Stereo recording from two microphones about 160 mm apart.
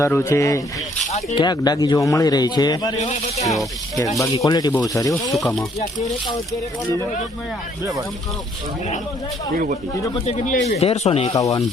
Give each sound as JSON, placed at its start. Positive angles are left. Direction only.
{"t": 0.0, "sound": "a man's voice", "side_deg": 15}
{"t": 3.0, "sound": "speech", "side_deg": 45}
{"t": 4.4, "sound": "a man's voice", "side_deg": 25}
{"t": 10.2, "sound": "speech", "side_deg": 45}
{"t": 11.3, "sound": "a man's voice", "side_deg": 20}